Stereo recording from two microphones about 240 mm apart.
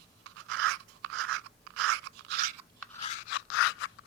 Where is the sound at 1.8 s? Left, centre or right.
Right.